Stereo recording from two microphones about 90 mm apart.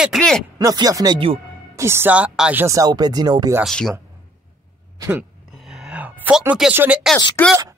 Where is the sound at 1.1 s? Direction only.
90° right.